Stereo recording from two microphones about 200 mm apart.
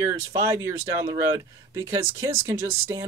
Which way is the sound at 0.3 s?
15° right (ahead or behind).